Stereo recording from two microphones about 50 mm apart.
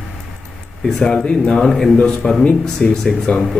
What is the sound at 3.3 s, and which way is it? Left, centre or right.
Speech, left.